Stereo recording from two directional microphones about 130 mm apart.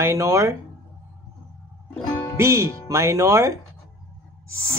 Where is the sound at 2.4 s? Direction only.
20° right (ahead or behind).